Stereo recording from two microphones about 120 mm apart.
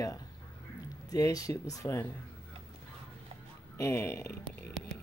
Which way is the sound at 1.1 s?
30° left (ahead or behind).